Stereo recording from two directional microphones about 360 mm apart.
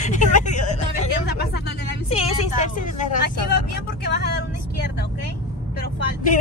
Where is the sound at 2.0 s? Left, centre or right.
Centre.